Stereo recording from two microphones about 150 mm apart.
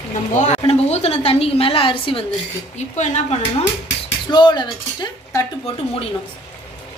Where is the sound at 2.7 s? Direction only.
50° left (ahead or behind).